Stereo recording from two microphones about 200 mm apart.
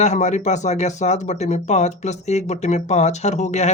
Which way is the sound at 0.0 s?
35° left (ahead or behind).